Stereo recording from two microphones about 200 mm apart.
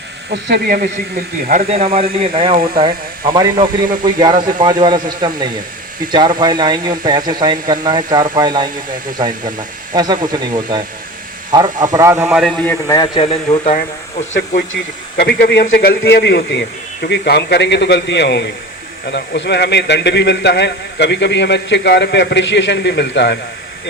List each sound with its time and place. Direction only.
0.4 s speech: 55° right (ahead or behind)
1.5 s a man's voice: 35° right (ahead or behind); by 12.7 s 5° left (ahead or behind)
12.9 s speech: 25° left (ahead or behind)
13.7 s speech: 40° left (ahead or behind)
15.1 s a man's voice: 55° left (ahead or behind)